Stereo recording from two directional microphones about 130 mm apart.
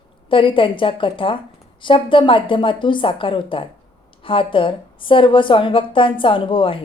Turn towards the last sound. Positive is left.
turn(degrees=40)  # may be behind; listen again after turning